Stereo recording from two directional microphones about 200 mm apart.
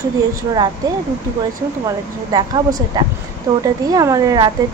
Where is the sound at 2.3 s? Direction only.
20° right (ahead or behind).